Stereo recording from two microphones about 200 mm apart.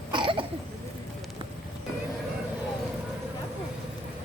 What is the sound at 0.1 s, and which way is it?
Cough, 25° right (ahead or behind).